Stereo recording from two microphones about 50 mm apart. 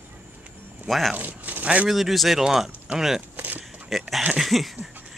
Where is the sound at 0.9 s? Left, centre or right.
Centre.